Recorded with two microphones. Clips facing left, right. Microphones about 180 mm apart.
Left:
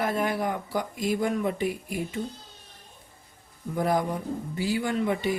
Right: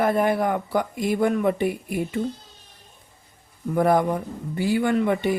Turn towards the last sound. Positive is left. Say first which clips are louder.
# right 5 dB
turn(degrees=-60)  # may be behind; listen again after turning